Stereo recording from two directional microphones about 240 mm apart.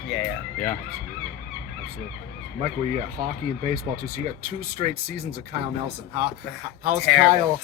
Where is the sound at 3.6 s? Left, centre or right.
Right.